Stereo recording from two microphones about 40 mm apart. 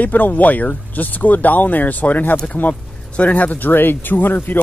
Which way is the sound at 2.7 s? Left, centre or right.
Left.